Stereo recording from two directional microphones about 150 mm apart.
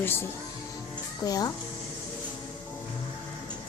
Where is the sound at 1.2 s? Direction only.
25° left (ahead or behind).